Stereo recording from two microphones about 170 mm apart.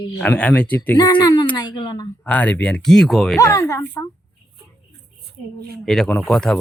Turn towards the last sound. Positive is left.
turn(degrees=5)  # may be behind; listen again after turning